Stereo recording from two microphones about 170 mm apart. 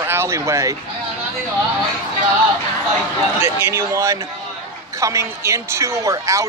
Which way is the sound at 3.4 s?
15° right (ahead or behind).